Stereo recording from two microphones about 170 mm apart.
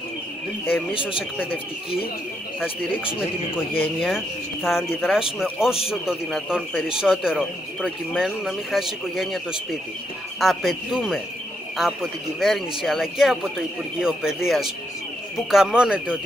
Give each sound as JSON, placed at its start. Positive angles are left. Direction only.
{"t": 3.7, "sound": "speech", "side_deg": 10}
{"t": 4.6, "sound": "speech", "side_deg": 0}